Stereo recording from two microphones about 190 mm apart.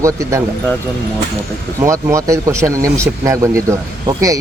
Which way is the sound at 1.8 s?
15° right (ahead or behind).